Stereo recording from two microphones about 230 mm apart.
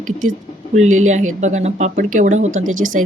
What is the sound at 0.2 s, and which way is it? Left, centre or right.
Speech, right.